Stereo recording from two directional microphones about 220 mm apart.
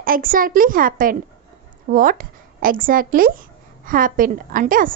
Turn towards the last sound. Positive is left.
turn(degrees=-40)  # may be behind; listen again after turning